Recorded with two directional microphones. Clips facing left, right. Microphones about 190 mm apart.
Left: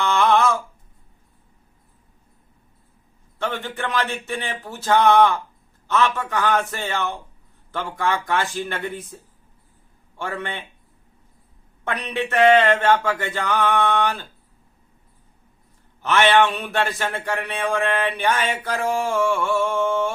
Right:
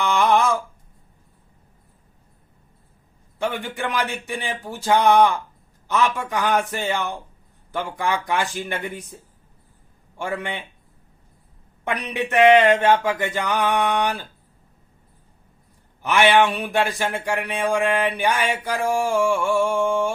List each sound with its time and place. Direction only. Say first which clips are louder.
0.0 s a sound: even; 15° right (ahead or behind)
3.3 s speech: right 1 dB; 15° right (ahead or behind)
10.2 s speech: right 2 dB; 15° right (ahead or behind)
11.9 s speech: even; 15° right (ahead or behind)
16.0 s speech: even; 15° right (ahead or behind)